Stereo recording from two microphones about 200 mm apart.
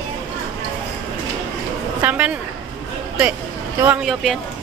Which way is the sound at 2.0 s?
10° right (ahead or behind).